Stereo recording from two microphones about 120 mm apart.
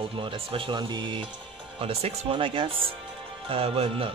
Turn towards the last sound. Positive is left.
turn(degrees=-55)  # may be behind; listen again after turning